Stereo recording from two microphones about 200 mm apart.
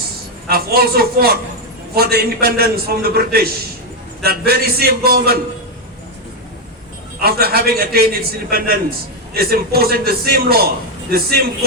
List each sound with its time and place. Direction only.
0.4 s a man's voice: 50° right (ahead or behind)
7.2 s a man's voice: 50° right (ahead or behind)